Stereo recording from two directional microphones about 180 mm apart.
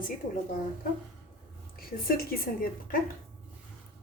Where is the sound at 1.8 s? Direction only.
55° left (ahead or behind).